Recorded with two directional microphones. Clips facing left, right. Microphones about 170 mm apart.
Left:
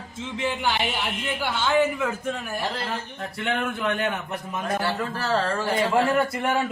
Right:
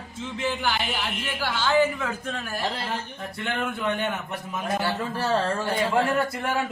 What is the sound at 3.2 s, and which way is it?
A man's voice, centre (ahead or behind).